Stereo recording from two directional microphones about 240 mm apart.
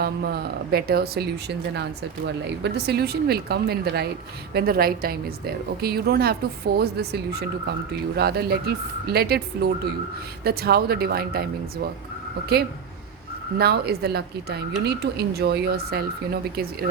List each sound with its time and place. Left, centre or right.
0.0 s speech: right